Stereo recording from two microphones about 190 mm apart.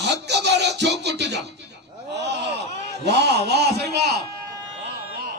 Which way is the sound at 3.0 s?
60° right (ahead or behind).